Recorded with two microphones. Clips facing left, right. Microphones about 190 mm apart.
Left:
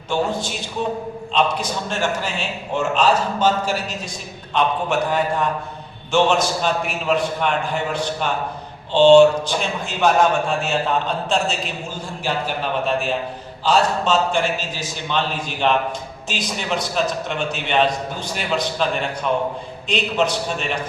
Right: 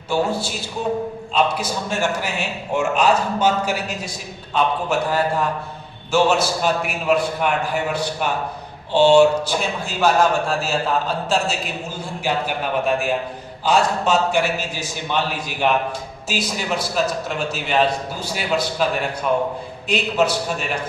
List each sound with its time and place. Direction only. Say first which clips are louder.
0.1 s a man's voice: right 1 dB; 5° right (ahead or behind)
19.9 s a man's voice: right 1 dB; 5° right (ahead or behind)